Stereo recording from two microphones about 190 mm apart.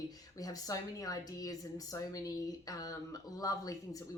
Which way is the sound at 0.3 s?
20° left (ahead or behind).